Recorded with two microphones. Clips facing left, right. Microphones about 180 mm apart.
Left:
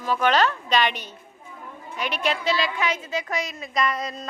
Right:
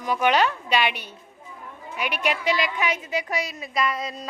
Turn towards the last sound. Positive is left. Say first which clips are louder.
# left 1 dB
turn(degrees=-5)  # may be behind; listen again after turning